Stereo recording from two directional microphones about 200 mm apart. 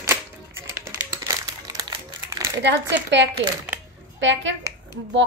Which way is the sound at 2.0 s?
15° right (ahead or behind).